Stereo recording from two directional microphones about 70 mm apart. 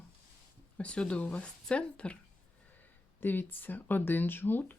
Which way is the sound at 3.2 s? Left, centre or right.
Left.